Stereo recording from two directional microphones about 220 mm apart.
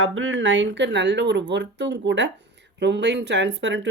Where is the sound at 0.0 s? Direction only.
65° right (ahead or behind).